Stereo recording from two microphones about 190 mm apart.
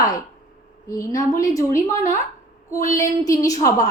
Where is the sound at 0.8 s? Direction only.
15° left (ahead or behind).